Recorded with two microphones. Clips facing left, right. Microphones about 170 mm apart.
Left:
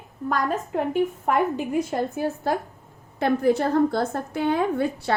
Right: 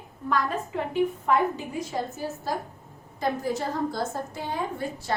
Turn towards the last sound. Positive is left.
turn(degrees=65)  # may be behind; listen again after turning